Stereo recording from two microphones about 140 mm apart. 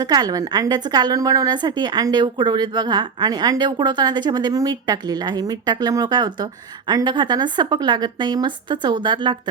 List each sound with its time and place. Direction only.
0.0 s a woman's voice: 30° right (ahead or behind)